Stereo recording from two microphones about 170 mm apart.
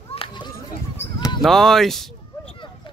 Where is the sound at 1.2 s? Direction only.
20° left (ahead or behind).